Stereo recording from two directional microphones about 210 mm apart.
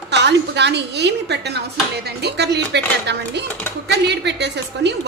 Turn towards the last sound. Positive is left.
turn(degrees=-55)  # may be behind; listen again after turning